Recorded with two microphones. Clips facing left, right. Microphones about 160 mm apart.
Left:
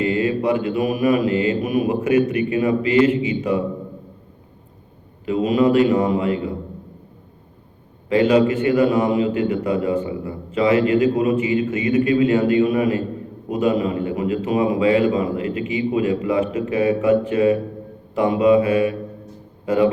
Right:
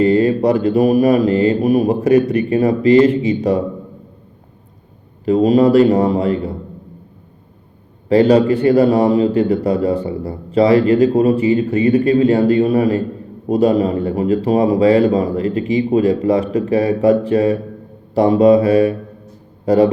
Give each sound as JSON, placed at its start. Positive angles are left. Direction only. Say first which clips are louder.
{"t": 0.0, "sound": "a man's voice", "louder": "right 7 dB", "side_deg": -35}
{"t": 5.2, "sound": "a man's voice", "louder": "right 6 dB", "side_deg": -35}
{"t": 8.1, "sound": "a man's voice", "louder": "right 4 dB", "side_deg": -35}